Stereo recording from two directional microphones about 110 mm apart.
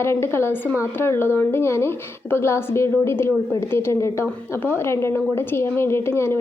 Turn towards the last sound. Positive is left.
turn(degrees=20)  # may be behind; listen again after turning